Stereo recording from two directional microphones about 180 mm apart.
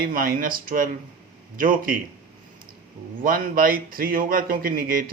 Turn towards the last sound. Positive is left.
turn(degrees=-50)  # may be behind; listen again after turning